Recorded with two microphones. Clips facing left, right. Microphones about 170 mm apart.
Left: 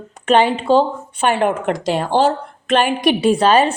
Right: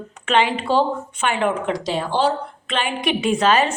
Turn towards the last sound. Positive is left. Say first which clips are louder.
# left 4 dB
turn(degrees=30)  # may be behind; listen again after turning